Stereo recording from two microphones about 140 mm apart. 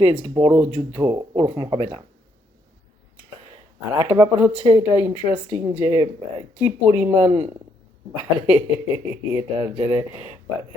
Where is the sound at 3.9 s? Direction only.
15° right (ahead or behind).